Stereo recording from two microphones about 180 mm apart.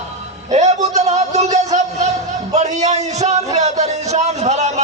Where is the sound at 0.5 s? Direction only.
40° right (ahead or behind).